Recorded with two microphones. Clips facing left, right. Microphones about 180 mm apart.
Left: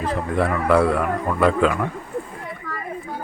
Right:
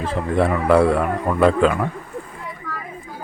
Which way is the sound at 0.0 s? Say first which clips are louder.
Right 2 dB; 25° right (ahead or behind).